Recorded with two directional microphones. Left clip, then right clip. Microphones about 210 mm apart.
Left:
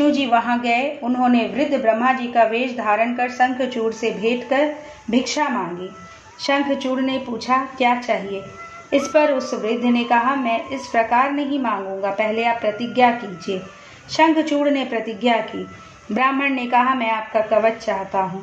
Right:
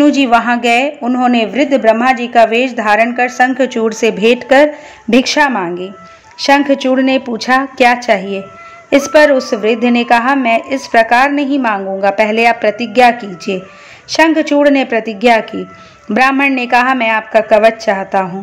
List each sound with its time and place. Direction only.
0.0 s a woman's voice: 35° right (ahead or behind)